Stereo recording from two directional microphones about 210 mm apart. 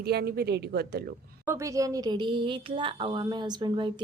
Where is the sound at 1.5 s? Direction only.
15° right (ahead or behind).